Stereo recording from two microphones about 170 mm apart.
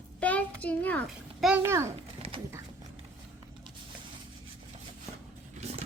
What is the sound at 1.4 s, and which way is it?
Speech, 10° right (ahead or behind).